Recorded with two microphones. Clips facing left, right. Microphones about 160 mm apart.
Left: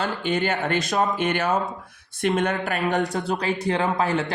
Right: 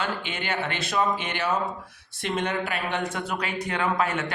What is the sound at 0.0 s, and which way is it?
Speech, 40° left (ahead or behind).